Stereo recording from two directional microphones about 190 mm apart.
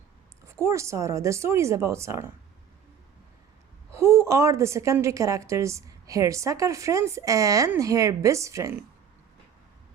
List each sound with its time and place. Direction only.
0.4 s a woman's voice: 15° right (ahead or behind)
3.9 s a woman's voice: 15° right (ahead or behind)